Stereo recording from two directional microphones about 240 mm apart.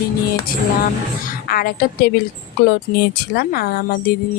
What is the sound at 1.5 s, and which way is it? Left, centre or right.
Speech, left.